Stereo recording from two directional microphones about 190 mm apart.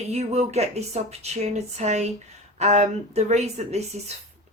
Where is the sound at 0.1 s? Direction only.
35° right (ahead or behind).